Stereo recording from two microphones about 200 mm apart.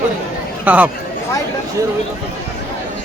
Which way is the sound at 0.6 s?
10° right (ahead or behind).